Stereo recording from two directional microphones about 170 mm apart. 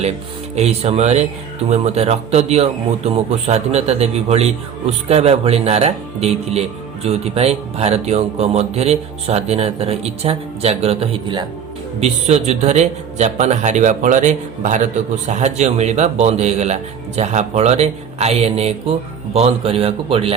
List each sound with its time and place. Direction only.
0.5 s a man's voice: 40° right (ahead or behind)